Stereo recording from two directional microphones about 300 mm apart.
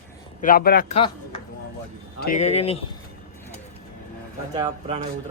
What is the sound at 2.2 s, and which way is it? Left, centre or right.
Speech, left.